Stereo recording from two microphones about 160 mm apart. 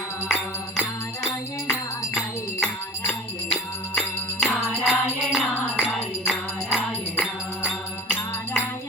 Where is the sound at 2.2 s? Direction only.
5° right (ahead or behind).